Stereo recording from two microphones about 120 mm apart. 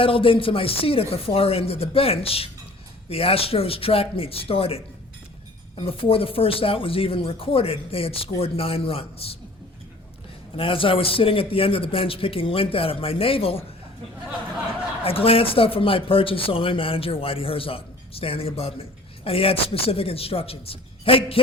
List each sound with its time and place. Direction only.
0.0 s speech: 45° left (ahead or behind)
5.8 s speech: 50° left (ahead or behind)
10.6 s speech: 50° left (ahead or behind)
15.0 s speech: 50° left (ahead or behind)